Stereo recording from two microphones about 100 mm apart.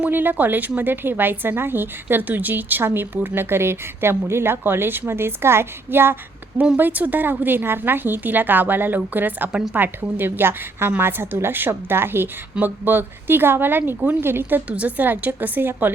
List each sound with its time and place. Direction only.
0.0 s a woman's voice: 20° right (ahead or behind)
9.7 s a woman's voice: 20° right (ahead or behind)